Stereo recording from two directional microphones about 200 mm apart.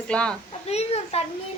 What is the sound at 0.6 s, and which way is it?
Speech, 30° left (ahead or behind).